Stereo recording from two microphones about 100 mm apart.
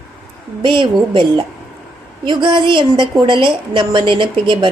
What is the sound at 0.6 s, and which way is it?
A woman's voice, 55° right (ahead or behind).